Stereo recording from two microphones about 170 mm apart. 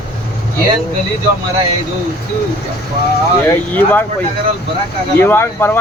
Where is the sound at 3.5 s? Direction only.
10° left (ahead or behind).